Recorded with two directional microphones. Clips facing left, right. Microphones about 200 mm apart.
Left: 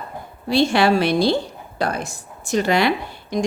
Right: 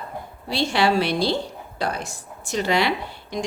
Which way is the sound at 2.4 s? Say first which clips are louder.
Left 4 dB; 50° left (ahead or behind).